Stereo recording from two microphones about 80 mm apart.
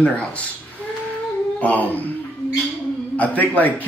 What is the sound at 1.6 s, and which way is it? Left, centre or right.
Speech, left.